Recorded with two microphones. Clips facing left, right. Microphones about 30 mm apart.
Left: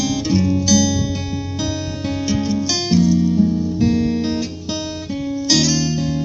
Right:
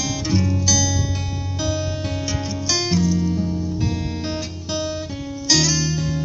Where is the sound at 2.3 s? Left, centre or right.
Left.